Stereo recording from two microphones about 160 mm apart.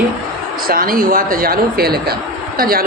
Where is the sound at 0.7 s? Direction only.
65° right (ahead or behind).